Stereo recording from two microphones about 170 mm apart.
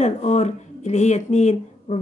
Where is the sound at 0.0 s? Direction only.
40° left (ahead or behind).